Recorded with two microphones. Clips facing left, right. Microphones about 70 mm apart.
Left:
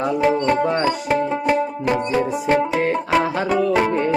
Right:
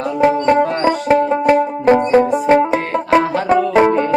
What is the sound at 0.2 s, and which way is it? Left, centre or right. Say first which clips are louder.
Music: right 7 dB; right.